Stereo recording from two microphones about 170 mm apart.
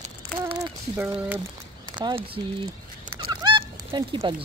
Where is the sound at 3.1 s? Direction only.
25° right (ahead or behind).